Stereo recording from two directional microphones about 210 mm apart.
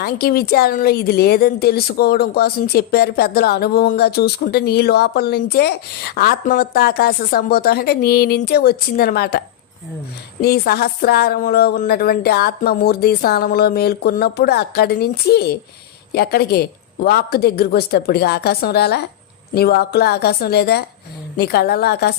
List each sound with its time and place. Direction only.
0.0 s speech: 45° left (ahead or behind)
10.4 s speech: 45° left (ahead or behind)